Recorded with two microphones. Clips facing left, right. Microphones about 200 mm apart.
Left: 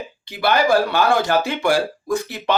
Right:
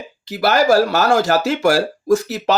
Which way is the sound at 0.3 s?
45° right (ahead or behind).